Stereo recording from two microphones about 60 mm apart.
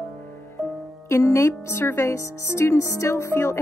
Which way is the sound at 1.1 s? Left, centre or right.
Left.